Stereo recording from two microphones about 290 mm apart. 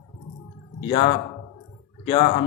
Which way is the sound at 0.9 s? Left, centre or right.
Left.